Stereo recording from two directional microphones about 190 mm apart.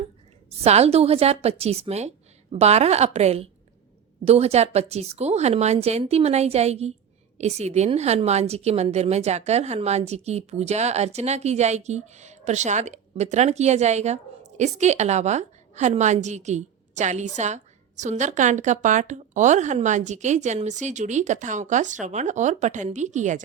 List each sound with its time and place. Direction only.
0.6 s a woman's voice: 35° right (ahead or behind)